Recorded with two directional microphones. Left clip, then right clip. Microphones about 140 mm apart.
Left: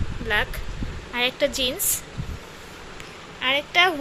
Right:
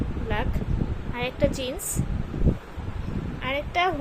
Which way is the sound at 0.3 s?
5° left (ahead or behind).